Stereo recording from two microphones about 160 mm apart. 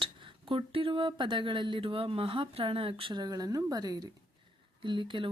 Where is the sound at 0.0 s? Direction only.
35° right (ahead or behind).